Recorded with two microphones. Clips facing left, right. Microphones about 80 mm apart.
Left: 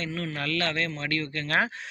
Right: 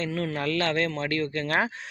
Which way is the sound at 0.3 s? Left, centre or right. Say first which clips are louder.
Right 3 dB; right.